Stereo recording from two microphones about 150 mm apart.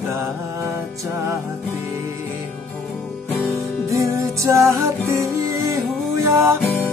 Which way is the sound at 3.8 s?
20° right (ahead or behind).